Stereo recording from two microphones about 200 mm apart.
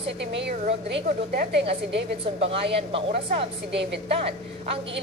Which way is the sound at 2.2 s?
30° right (ahead or behind).